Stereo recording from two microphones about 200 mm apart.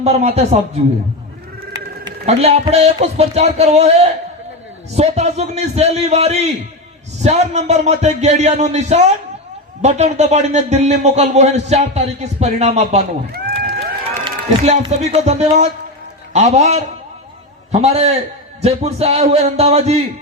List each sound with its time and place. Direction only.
0.0 s speech: 30° right (ahead or behind)
2.2 s speech: 30° right (ahead or behind)
13.3 s crowd: 50° right (ahead or behind)
14.3 s speech: 35° right (ahead or behind)